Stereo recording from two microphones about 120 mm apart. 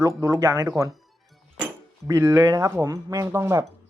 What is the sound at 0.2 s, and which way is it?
Speech, 25° right (ahead or behind).